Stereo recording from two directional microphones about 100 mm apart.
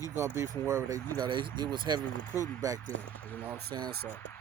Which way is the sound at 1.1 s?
50° right (ahead or behind).